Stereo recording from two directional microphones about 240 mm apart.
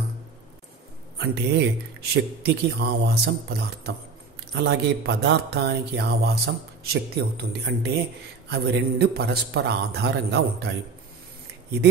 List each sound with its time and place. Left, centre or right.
1.2 s speech: right